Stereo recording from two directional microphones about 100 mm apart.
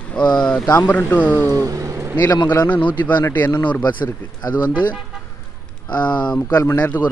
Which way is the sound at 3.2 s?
25° left (ahead or behind).